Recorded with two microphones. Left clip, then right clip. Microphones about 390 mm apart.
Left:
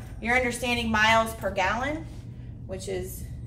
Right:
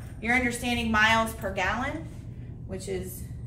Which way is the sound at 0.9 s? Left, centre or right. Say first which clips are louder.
Left 1 dB; left.